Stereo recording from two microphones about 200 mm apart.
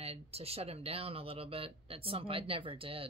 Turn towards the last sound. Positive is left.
turn(degrees=-25)  # may be behind; listen again after turning